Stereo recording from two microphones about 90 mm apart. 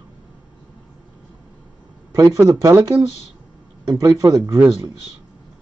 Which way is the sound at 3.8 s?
40° right (ahead or behind).